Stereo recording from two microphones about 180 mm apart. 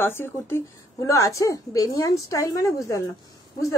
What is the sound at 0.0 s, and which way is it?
A woman's voice, 15° left (ahead or behind).